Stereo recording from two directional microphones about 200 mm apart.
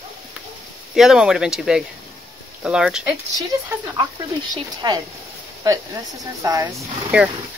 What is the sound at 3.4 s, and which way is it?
Speech, 20° right (ahead or behind).